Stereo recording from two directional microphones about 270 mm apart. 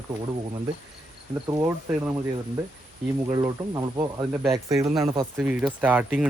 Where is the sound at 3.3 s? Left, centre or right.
Centre.